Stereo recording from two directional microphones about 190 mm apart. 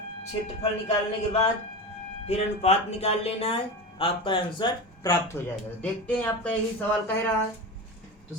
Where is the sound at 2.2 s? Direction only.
35° left (ahead or behind); by 5.4 s 20° left (ahead or behind).